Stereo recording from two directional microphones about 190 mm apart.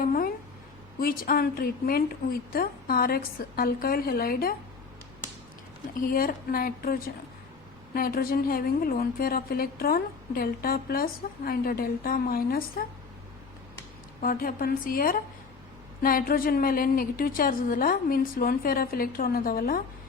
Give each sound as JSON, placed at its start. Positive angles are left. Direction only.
{"t": 0.0, "sound": "a sound", "side_deg": 50}
{"t": 0.9, "sound": "a woman's voice", "side_deg": 50}
{"t": 6.0, "sound": "a woman's voice", "side_deg": 50}
{"t": 14.2, "sound": "a woman's voice", "side_deg": 50}